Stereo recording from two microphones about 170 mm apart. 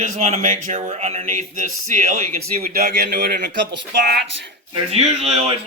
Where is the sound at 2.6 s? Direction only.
60° right (ahead or behind); by 4.5 s 90° right.